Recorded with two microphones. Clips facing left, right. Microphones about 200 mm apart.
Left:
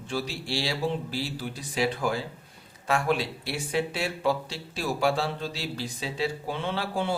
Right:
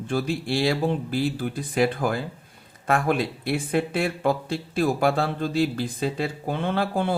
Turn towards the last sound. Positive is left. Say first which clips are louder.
# right 5 dB
turn(degrees=-55)  # may be behind; listen again after turning